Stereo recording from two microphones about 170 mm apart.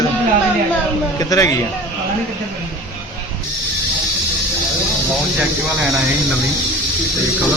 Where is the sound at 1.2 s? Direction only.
20° left (ahead or behind).